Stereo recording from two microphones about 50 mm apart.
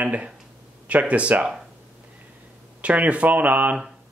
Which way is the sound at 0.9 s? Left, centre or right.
Right.